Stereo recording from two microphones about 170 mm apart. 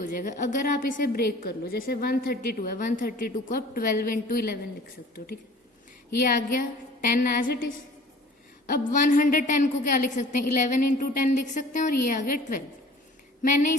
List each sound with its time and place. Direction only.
0.0 s a woman's voice: 50° left (ahead or behind)
6.2 s a woman's voice: 55° left (ahead or behind)
8.8 s a woman's voice: 50° left (ahead or behind)